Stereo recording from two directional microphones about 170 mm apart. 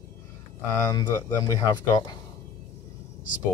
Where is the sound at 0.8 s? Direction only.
20° left (ahead or behind).